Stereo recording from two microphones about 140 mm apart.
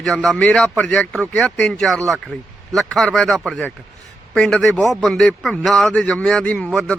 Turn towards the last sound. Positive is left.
turn(degrees=0)  # may be behind; listen again after turning